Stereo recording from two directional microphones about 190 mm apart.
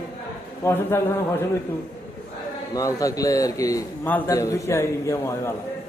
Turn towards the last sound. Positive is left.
turn(degrees=15)  # may be behind; listen again after turning